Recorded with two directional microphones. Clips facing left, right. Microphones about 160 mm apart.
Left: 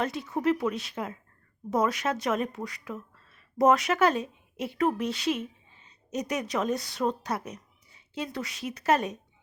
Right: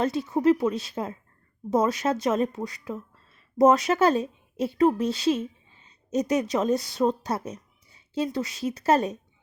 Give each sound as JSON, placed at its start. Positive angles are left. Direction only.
{"t": 0.0, "sound": "a woman's voice", "side_deg": -30}